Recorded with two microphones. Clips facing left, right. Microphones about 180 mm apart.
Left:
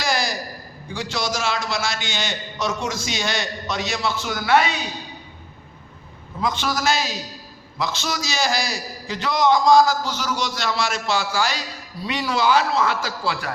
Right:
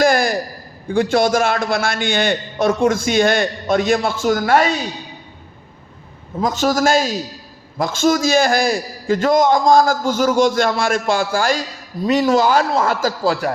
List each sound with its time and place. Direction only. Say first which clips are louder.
0.0 s a sound: right 9 dB; 55° right (ahead or behind)
0.9 s a man's voice: right 12 dB; 55° right (ahead or behind)
6.4 s a man's voice: right 7 dB; 45° right (ahead or behind)